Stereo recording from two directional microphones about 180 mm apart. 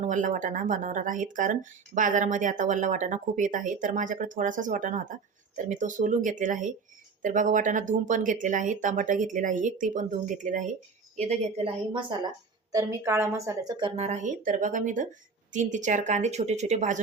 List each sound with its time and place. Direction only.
0.0 s speech: 45° right (ahead or behind); by 12.3 s 25° right (ahead or behind)
12.7 s speech: 15° right (ahead or behind); by 17.0 s 40° right (ahead or behind)